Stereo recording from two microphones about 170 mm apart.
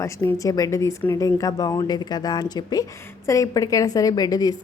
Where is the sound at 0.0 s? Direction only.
15° left (ahead or behind).